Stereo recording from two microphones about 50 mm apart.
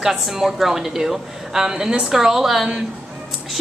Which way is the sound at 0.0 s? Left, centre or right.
Centre.